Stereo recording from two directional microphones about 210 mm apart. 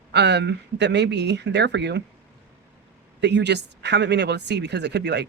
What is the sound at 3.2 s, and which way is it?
Speech, 55° right (ahead or behind).